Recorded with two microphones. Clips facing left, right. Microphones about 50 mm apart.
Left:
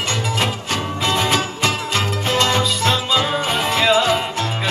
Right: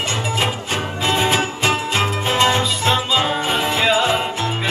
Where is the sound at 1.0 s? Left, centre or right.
Right.